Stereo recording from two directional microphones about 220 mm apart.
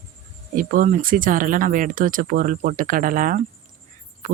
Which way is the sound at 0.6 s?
40° right (ahead or behind).